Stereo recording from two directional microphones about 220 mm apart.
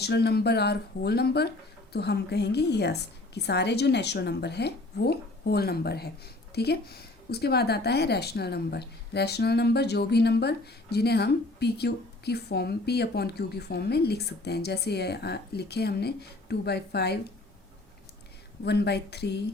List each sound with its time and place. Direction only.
0.0 s speech: 50° left (ahead or behind)
18.6 s speech: 50° left (ahead or behind)